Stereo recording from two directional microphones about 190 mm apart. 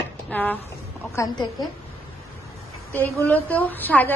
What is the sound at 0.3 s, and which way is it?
A woman's voice, 10° left (ahead or behind).